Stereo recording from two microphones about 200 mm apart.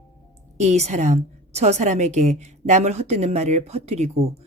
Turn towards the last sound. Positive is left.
turn(degrees=-30)  # may be behind; listen again after turning